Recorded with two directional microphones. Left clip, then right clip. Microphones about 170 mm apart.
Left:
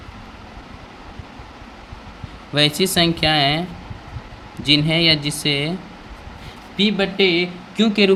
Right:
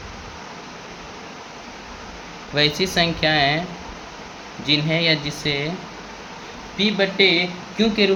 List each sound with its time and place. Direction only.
2.6 s speech: 50° left (ahead or behind)
4.6 s speech: 55° left (ahead or behind)
6.7 s speech: 55° left (ahead or behind)